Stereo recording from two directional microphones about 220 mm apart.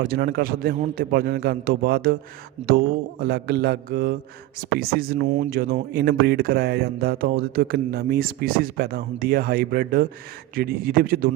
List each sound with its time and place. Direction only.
0.0 s speech: 45° right (ahead or behind)